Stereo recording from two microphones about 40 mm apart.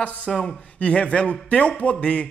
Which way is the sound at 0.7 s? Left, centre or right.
Left.